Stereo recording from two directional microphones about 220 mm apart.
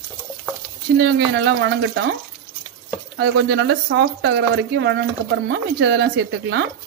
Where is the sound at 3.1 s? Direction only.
50° right (ahead or behind).